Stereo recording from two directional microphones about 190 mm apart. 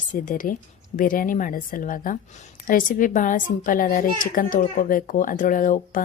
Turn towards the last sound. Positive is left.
turn(degrees=45)  # may be behind; listen again after turning